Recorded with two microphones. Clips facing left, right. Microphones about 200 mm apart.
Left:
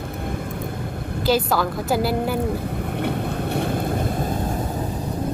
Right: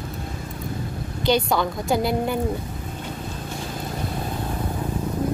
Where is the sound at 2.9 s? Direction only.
65° left (ahead or behind).